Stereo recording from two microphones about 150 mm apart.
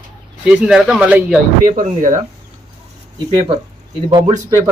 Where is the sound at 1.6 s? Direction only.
60° right (ahead or behind).